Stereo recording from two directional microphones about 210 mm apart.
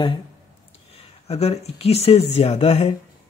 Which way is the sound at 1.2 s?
30° left (ahead or behind).